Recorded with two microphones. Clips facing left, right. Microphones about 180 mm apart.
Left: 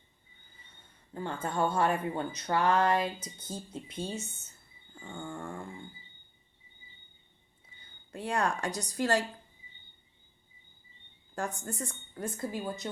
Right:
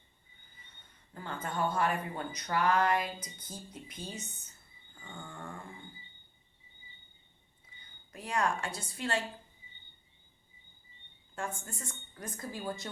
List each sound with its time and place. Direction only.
1.1 s speech: 25° left (ahead or behind)
8.1 s a woman's voice: 30° left (ahead or behind)
11.3 s speech: 40° left (ahead or behind); by 12.9 s 20° left (ahead or behind)